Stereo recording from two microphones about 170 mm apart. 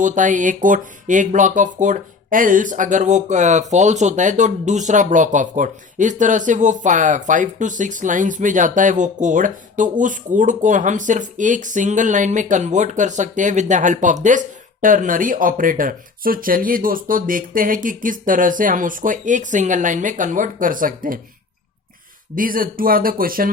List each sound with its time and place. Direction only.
0.0 s speech: 50° right (ahead or behind)
22.4 s speech: 55° right (ahead or behind)